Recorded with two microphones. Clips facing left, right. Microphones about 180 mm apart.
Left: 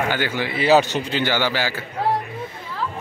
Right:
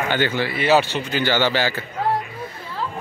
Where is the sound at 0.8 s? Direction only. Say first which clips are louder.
Left 2 dB; 40° left (ahead or behind).